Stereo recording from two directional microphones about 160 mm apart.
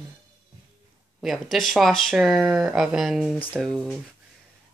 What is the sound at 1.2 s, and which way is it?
Speech, centre (ahead or behind).